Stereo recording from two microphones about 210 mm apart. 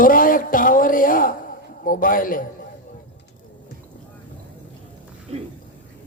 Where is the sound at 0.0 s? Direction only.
40° left (ahead or behind).